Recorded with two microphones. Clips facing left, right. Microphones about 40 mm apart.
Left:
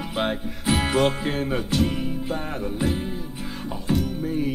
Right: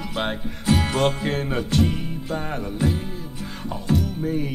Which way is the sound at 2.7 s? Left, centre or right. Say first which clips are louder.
Right 1 dB; centre.